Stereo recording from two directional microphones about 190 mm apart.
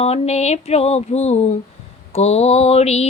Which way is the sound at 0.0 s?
35° left (ahead or behind).